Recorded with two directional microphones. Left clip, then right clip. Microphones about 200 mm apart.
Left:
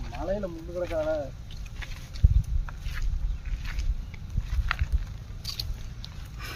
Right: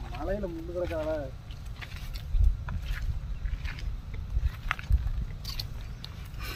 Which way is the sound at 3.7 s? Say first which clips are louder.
Left 1 dB; 10° left (ahead or behind).